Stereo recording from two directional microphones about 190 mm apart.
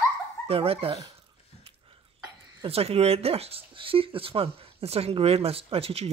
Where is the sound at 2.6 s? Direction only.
30° right (ahead or behind).